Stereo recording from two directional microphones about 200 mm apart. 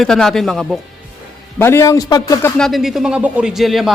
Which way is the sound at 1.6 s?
10° left (ahead or behind).